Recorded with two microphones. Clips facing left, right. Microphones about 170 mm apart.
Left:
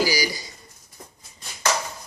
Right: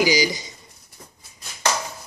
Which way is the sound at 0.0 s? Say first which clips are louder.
Right 4 dB; 20° right (ahead or behind).